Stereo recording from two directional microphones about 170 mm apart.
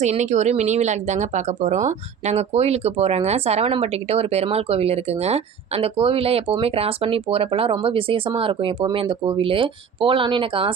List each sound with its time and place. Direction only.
0.0 s speech: 45° right (ahead or behind)